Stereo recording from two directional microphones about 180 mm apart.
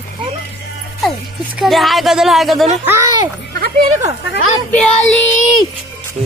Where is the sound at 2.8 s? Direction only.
15° right (ahead or behind).